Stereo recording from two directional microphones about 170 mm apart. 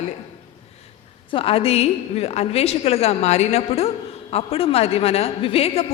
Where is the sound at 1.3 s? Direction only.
35° left (ahead or behind).